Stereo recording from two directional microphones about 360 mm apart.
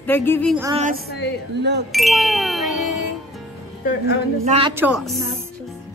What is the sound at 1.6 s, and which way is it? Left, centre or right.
Wind chime, right.